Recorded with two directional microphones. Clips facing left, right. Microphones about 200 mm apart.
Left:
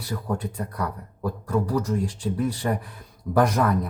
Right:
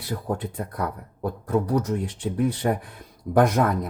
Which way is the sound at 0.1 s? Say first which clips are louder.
Right 1 dB; 30° right (ahead or behind).